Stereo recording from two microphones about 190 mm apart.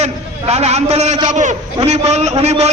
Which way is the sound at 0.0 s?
35° right (ahead or behind).